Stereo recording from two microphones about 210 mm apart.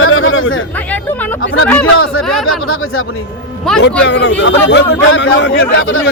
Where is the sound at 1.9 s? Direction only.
75° left (ahead or behind).